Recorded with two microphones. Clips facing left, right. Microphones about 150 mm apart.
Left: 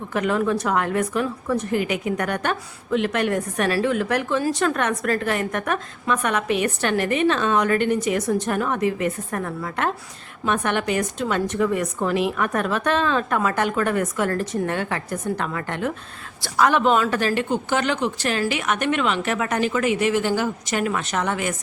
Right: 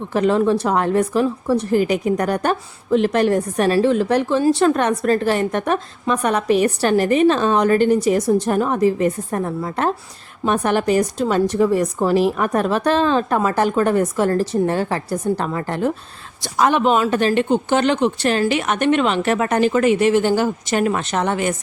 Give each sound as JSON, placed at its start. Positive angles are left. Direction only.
{"t": 0.1, "sound": "a woman's voice", "side_deg": -30}
{"t": 16.4, "sound": "a woman's voice", "side_deg": -20}